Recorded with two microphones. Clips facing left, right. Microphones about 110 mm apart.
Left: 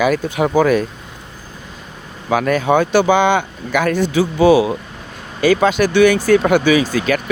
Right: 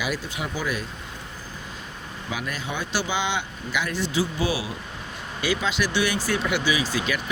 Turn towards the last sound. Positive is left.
turn(degrees=50)  # may be behind; listen again after turning